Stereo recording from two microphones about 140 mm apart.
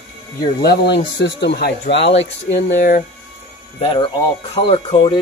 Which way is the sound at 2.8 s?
75° left (ahead or behind).